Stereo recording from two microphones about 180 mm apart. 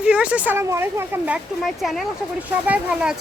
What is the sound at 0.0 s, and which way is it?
Speech, 5° right (ahead or behind).